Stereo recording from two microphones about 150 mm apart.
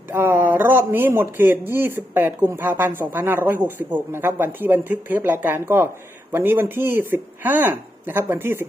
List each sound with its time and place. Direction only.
0.1 s speech: 15° right (ahead or behind)